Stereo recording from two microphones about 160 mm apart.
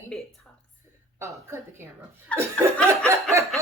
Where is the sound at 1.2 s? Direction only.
15° right (ahead or behind).